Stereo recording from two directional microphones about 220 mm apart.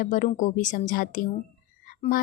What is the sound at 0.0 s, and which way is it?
A woman's voice, 35° left (ahead or behind).